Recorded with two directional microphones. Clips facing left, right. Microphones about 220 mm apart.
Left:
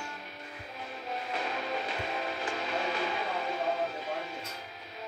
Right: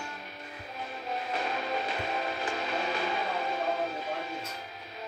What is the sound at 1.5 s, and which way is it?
Music, 45° right (ahead or behind).